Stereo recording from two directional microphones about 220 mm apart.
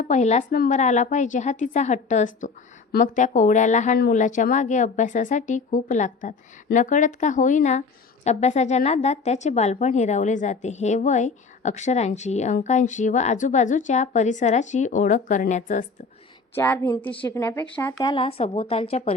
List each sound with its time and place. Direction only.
0.0 s a woman's voice: 30° left (ahead or behind)
16.6 s a woman's voice: 10° left (ahead or behind); by 19.1 s 25° left (ahead or behind)